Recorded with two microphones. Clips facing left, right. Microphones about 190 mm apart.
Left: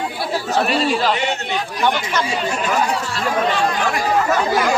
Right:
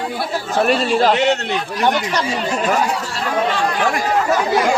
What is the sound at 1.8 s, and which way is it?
Speech, 35° right (ahead or behind).